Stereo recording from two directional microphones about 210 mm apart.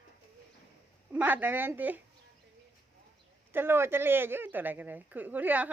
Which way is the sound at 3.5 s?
10° right (ahead or behind).